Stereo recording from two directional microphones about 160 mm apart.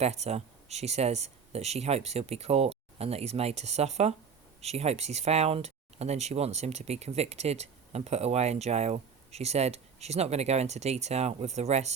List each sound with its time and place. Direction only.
0.0 s speech: 40° right (ahead or behind)